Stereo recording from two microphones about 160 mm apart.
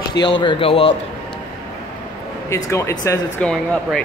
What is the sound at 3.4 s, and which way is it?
Speech, 5° left (ahead or behind).